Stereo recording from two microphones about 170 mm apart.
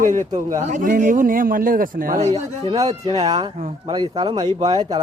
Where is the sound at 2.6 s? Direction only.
20° right (ahead or behind).